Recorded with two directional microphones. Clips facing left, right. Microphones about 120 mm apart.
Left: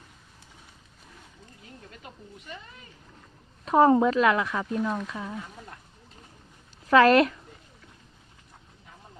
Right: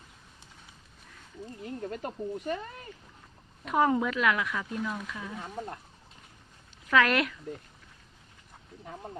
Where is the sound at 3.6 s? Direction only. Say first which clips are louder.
Left 7 dB; 35° left (ahead or behind).